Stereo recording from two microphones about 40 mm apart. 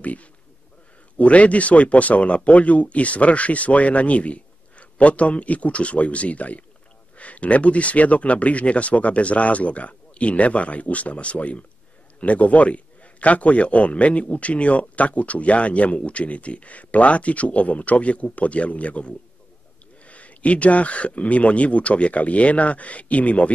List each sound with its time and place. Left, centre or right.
0.0 s a man's voice: left